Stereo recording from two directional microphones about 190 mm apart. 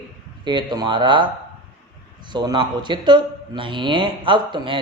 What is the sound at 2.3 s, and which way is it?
A man's voice, 25° right (ahead or behind).